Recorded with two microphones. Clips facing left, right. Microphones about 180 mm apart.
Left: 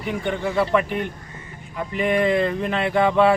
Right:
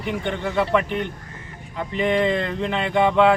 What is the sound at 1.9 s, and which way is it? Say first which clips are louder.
Speech: left 1 dB; 10° left (ahead or behind).